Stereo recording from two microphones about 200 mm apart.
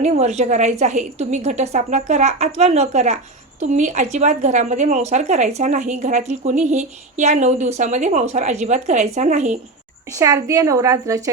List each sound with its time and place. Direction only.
0.0 s speech: 35° right (ahead or behind)
10.1 s a woman's voice: 15° right (ahead or behind)